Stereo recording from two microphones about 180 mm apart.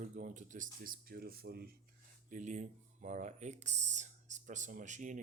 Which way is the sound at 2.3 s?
45° right (ahead or behind).